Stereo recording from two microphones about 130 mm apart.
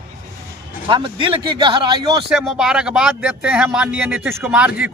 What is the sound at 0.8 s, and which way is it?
Speech, 40° right (ahead or behind).